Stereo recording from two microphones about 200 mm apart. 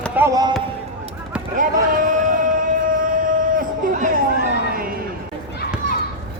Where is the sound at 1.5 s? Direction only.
40° right (ahead or behind).